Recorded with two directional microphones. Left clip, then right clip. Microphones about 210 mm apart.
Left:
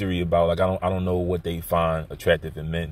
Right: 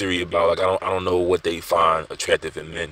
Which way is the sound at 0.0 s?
35° right (ahead or behind).